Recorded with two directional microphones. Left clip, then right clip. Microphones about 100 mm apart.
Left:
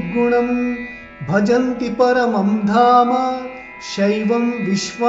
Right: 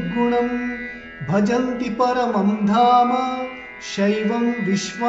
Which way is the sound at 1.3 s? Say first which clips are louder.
Left 4 dB; 10° left (ahead or behind).